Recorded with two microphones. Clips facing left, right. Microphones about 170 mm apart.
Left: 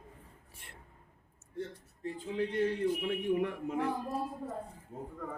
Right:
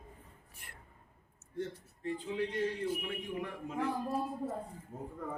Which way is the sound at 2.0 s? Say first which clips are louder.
Left 1 dB; 50° left (ahead or behind).